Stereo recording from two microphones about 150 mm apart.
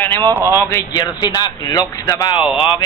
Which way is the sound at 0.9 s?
30° left (ahead or behind).